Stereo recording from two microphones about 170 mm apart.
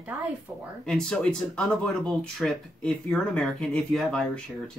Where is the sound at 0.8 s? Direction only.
5° left (ahead or behind).